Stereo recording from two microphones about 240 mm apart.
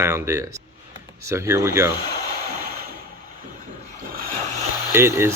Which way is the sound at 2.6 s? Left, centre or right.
Right.